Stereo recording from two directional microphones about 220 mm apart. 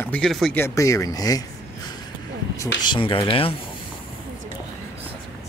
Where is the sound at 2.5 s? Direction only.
15° left (ahead or behind).